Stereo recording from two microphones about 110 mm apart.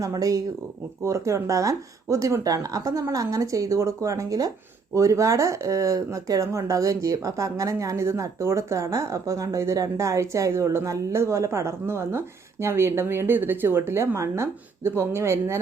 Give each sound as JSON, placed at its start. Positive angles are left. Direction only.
{"t": 0.0, "sound": "speech", "side_deg": -30}